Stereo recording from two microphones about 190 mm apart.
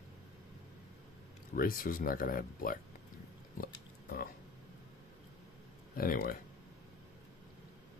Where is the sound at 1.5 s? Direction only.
50° left (ahead or behind).